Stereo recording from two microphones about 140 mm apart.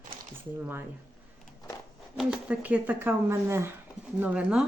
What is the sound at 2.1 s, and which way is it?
Speech, 5° right (ahead or behind).